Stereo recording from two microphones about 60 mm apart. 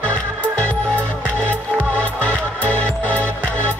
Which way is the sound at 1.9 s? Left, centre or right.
Left.